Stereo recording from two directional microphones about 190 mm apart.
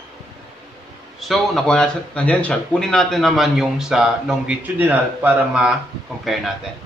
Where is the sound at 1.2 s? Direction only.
Centre (ahead or behind).